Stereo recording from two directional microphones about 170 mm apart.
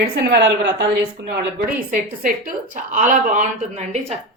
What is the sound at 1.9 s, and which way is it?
A woman's voice, 50° right (ahead or behind).